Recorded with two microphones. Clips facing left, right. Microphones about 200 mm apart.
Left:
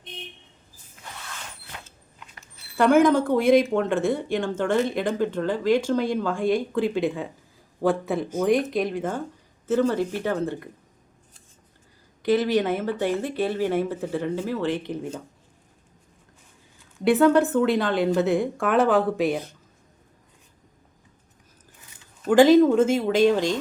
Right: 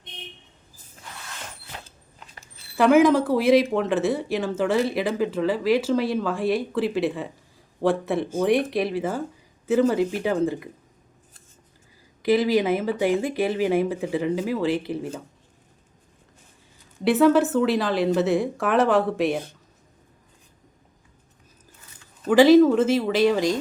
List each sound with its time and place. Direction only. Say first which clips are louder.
2.1 s a sound: right 1 dB; 35° right (ahead or behind)
2.7 s a woman's voice: right 1 dB; 5° right (ahead or behind)
12.2 s speech: right 1 dB; 10° right (ahead or behind)
17.0 s a woman's voice: even; centre (ahead or behind)
22.3 s speech: right 1 dB; 5° right (ahead or behind)